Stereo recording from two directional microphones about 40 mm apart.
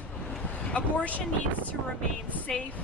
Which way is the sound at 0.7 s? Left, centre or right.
Left.